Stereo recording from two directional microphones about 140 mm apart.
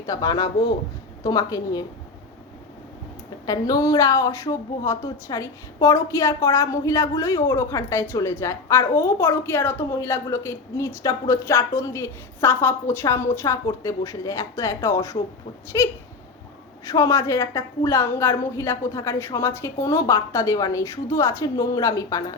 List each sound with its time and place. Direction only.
0.0 s a woman's voice: 25° left (ahead or behind)
3.4 s a woman's voice: 25° left (ahead or behind)